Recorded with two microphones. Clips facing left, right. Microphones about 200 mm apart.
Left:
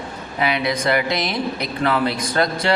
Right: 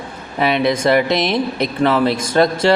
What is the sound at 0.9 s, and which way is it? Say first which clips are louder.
Speech: right 6 dB; 20° right (ahead or behind).